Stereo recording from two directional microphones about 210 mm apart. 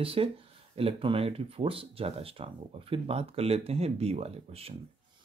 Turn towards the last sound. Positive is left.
turn(degrees=-30)  # may be behind; listen again after turning